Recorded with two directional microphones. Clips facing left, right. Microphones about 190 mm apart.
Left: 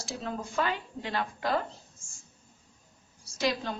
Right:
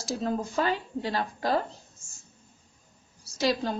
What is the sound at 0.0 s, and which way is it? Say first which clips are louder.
A woman's voice: right 6 dB; 40° right (ahead or behind).